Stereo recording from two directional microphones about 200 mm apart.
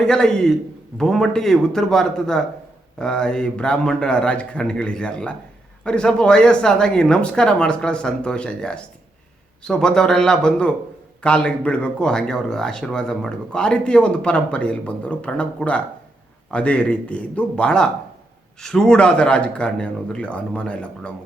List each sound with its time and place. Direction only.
0.0 s speech: 5° left (ahead or behind)